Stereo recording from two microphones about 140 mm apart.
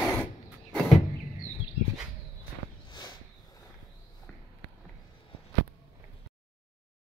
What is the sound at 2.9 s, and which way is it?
Walk, 35° left (ahead or behind).